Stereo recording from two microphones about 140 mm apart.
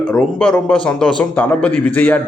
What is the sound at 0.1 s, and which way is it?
A man's voice, 5° left (ahead or behind).